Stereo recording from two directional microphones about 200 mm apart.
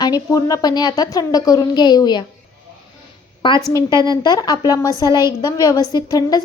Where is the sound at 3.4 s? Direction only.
25° left (ahead or behind).